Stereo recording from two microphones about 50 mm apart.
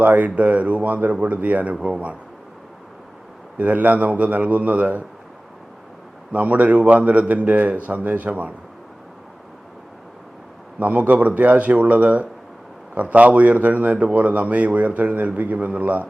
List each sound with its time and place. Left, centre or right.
0.0 s a man's voice: right
3.6 s a man's voice: right
6.3 s a man's voice: right
10.8 s a man's voice: right